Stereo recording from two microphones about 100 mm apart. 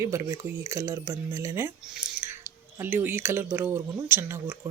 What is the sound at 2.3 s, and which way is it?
Speech, 20° right (ahead or behind).